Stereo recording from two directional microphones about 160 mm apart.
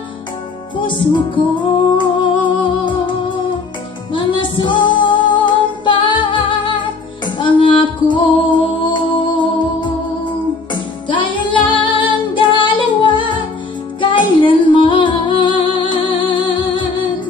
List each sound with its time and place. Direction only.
0.7 s music: 30° left (ahead or behind)